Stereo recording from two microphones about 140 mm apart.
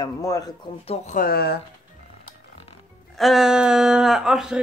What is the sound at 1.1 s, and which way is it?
Speech, 90° left.